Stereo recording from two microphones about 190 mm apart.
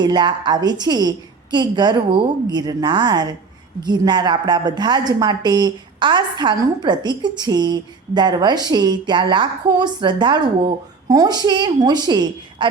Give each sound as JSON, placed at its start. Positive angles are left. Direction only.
{"t": 0.0, "sound": "a woman's voice", "side_deg": -25}